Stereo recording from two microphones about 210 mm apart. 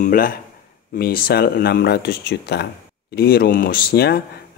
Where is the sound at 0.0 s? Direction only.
40° left (ahead or behind).